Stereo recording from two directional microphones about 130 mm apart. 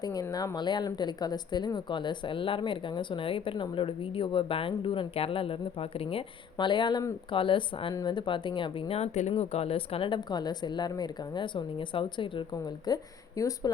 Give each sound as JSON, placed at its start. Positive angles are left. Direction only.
{"t": 0.0, "sound": "speech", "side_deg": 30}